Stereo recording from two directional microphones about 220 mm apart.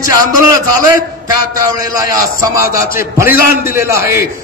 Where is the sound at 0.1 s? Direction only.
15° right (ahead or behind).